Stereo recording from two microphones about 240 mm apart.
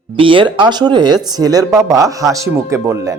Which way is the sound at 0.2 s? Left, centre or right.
Right.